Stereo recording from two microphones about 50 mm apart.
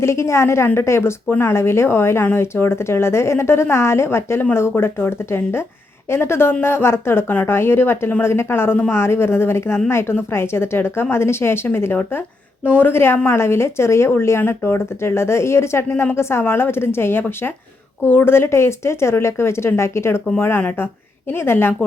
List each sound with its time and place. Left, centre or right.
0.0 s a woman's voice: left
21.3 s a woman's voice: left